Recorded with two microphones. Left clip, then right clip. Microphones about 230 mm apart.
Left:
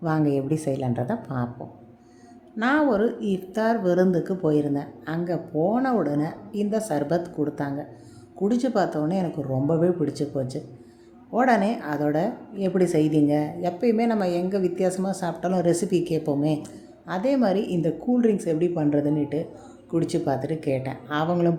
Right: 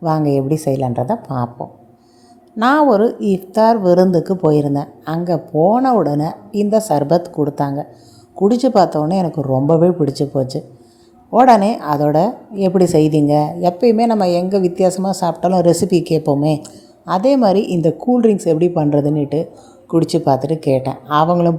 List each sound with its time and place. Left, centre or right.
0.0 s a woman's voice: centre